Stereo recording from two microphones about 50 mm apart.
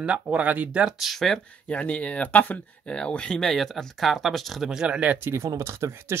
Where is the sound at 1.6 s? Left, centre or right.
Left.